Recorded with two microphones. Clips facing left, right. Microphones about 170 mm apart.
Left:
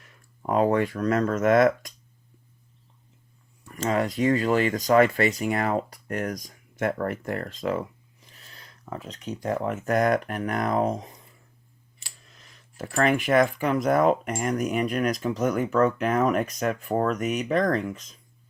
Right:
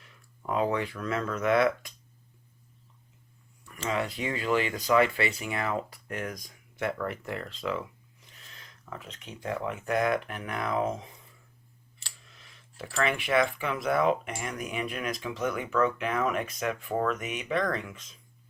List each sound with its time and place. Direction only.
0.4 s speech: 50° left (ahead or behind)
3.7 s speech: 40° left (ahead or behind)
12.3 s a sound: 40° left (ahead or behind)
13.0 s speech: 45° left (ahead or behind)